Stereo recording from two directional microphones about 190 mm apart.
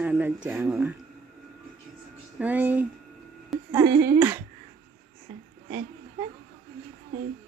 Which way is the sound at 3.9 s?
60° right (ahead or behind).